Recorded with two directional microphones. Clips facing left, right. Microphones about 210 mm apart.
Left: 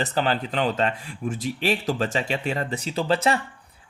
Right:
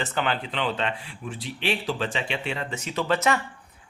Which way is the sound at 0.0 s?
40° left (ahead or behind).